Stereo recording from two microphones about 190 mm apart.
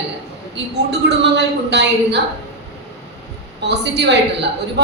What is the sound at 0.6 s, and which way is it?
A woman's voice, 65° right (ahead or behind).